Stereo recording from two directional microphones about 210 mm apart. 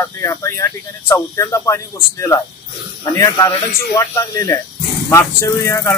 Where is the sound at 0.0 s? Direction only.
15° left (ahead or behind).